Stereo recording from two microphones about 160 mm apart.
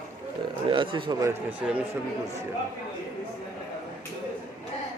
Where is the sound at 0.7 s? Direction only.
30° right (ahead or behind).